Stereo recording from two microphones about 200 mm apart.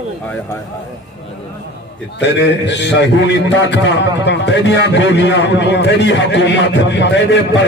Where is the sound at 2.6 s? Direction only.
60° left (ahead or behind).